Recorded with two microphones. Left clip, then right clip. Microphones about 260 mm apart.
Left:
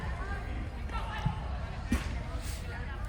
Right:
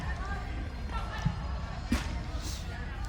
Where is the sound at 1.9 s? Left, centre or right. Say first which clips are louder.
Right 2 dB; right.